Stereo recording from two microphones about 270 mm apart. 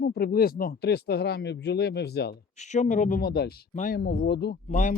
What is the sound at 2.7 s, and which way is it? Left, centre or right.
Speech, left.